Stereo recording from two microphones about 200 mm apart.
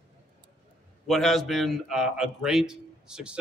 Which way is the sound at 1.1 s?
Centre (ahead or behind).